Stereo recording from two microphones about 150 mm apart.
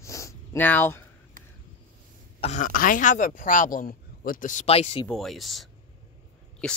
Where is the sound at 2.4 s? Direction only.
55° left (ahead or behind).